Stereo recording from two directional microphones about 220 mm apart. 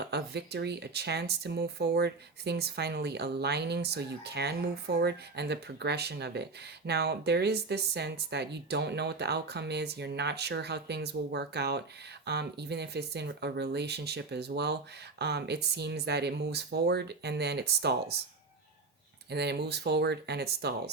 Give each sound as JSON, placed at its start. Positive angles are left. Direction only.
{"t": 0.0, "sound": "speech", "side_deg": -50}
{"t": 19.3, "sound": "speech", "side_deg": -50}